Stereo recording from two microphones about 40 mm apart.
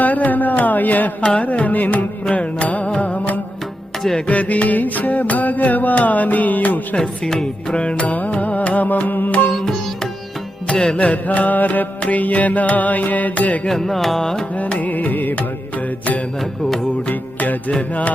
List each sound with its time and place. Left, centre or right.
0.0 s carnatic music: left
1.2 s music: left
1.5 s music: left
6.9 s music: centre
7.8 s music: left
8.1 s music: left
9.5 s music: centre
10.7 s music: centre
10.9 s music: left
13.7 s music: centre
14.5 s music: left
16.4 s mantra: centre
17.1 s music: left